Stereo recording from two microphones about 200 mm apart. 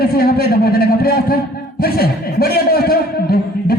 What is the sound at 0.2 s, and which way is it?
A man's voice, 50° left (ahead or behind).